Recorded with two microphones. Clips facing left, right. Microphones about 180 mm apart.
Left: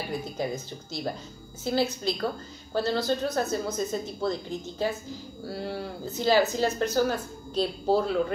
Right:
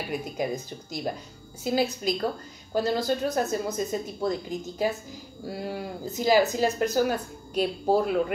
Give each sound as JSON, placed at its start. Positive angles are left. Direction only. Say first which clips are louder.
{"t": 0.1, "sound": "speech", "louder": "right 2 dB", "side_deg": -15}
{"t": 1.6, "sound": "speech", "louder": "right 1 dB", "side_deg": -15}